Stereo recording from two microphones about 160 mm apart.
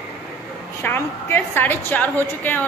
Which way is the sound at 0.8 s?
15° left (ahead or behind).